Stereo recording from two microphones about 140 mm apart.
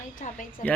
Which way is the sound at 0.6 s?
65° left (ahead or behind).